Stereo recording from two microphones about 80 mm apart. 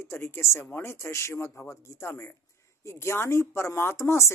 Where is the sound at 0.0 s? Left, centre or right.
Left.